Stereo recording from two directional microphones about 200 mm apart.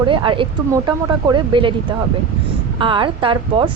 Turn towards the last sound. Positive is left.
turn(degrees=-25)  # may be behind; listen again after turning